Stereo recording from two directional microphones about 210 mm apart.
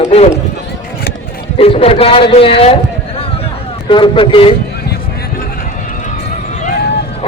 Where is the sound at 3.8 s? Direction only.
25° left (ahead or behind).